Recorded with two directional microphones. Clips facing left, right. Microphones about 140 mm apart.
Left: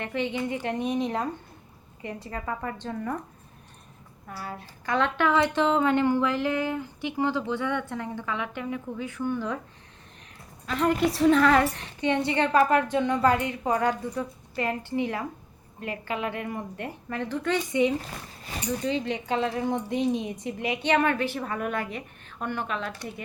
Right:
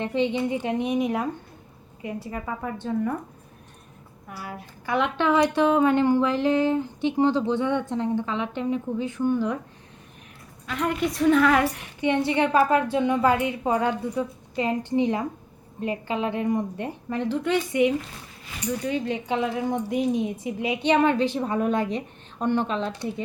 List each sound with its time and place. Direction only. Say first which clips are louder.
0.0 s a woman's voice: right 5 dB; 15° right (ahead or behind)
4.3 s a woman's voice: even; 10° right (ahead or behind)
10.7 s a woman's voice: left 2 dB; centre (ahead or behind)
19.3 s a woman's voice: right 1 dB; 10° right (ahead or behind); by 22.9 s 25° right (ahead or behind)